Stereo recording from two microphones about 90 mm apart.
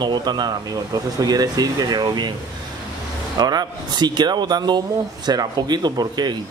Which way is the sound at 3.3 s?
50° right (ahead or behind).